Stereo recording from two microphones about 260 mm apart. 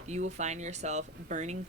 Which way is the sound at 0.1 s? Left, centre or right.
Right.